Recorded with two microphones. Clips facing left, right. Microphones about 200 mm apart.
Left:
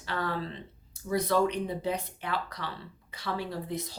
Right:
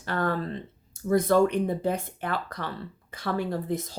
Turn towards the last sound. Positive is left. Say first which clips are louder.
# right 6 dB
turn(degrees=-50)  # may be behind; listen again after turning